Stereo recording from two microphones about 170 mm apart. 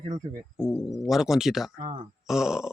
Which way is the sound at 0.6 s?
Centre (ahead or behind).